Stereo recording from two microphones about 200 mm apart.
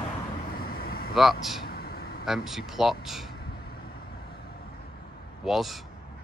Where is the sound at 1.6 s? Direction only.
50° left (ahead or behind).